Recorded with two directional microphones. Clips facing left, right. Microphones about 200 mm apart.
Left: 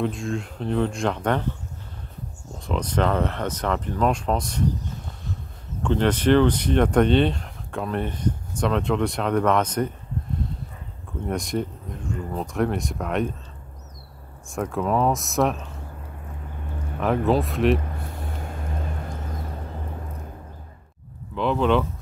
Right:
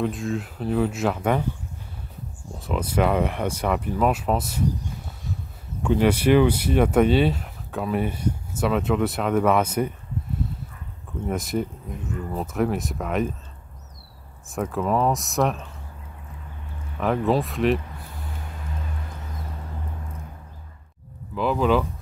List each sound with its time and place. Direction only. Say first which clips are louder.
0.0 s speech: even; centre (ahead or behind)
2.6 s speech: right 1 dB; 5° right (ahead or behind)
11.2 s speech: even; 5° right (ahead or behind)
14.5 s speech: even; centre (ahead or behind)
17.0 s speech: left 1 dB; centre (ahead or behind)
18.4 s music: left 5 dB; 50° left (ahead or behind)
21.4 s speech: even; 5° right (ahead or behind)